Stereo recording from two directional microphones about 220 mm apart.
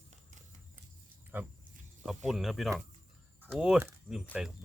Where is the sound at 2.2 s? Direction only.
Centre (ahead or behind).